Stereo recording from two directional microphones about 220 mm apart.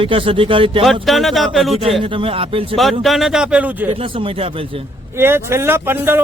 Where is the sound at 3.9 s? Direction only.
25° right (ahead or behind).